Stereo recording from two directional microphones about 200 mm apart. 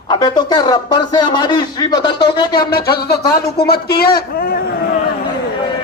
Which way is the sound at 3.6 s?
55° left (ahead or behind).